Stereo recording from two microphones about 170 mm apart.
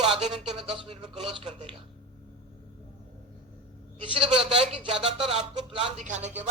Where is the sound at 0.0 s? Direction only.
35° right (ahead or behind).